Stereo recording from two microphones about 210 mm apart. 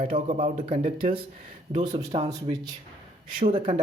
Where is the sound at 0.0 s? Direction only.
35° right (ahead or behind).